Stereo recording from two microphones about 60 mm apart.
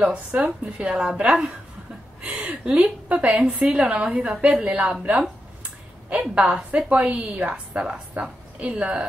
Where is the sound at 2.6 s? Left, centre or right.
Right.